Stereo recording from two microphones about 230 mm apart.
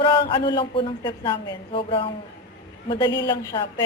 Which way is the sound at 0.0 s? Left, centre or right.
Left.